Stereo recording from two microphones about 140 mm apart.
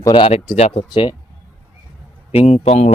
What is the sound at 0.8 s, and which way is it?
Speech, 35° left (ahead or behind).